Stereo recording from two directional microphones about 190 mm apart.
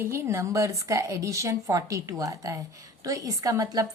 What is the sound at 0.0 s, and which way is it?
A woman's voice, 15° right (ahead or behind).